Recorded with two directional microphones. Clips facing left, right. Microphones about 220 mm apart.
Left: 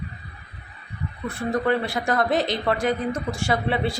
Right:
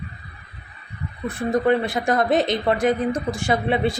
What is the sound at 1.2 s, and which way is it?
Speech, 20° right (ahead or behind).